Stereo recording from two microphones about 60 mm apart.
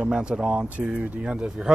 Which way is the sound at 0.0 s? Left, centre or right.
Centre.